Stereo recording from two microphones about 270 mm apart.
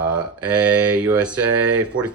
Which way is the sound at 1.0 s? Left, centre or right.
Centre.